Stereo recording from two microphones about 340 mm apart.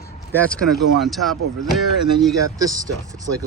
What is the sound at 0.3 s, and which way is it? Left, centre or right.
Speech, centre.